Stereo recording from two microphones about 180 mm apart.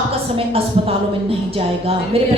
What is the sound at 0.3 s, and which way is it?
Speech, 30° right (ahead or behind).